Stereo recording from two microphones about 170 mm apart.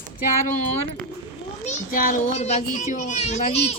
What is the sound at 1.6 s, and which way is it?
Speech, 50° left (ahead or behind).